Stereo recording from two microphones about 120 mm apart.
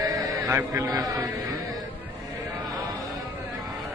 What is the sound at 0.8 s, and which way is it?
Speech, 30° right (ahead or behind).